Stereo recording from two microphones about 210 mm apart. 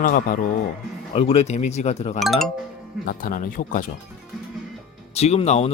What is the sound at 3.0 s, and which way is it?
Speech, 40° left (ahead or behind).